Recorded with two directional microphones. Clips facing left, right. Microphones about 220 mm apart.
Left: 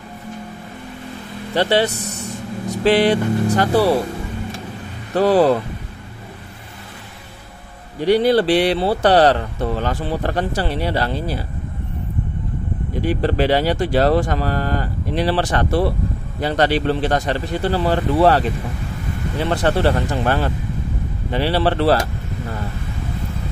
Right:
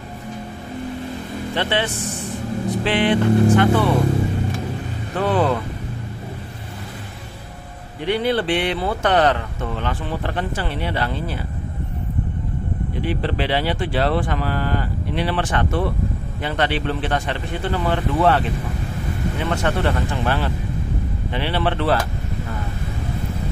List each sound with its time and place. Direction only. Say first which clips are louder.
1.5 s speech: left 6 dB; 35° left (ahead or behind)
5.1 s speech: left 6 dB; 35° left (ahead or behind)
8.0 s speech: left 6 dB; 40° left (ahead or behind)
13.0 s speech: left 6 dB; 45° left (ahead or behind)
19.5 s speech: left 5 dB; 35° left (ahead or behind)